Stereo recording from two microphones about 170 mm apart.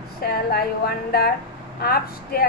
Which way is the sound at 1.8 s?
60° left (ahead or behind).